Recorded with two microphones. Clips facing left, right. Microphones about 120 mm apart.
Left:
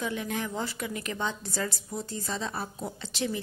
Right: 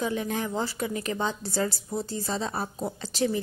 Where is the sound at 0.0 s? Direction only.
35° right (ahead or behind).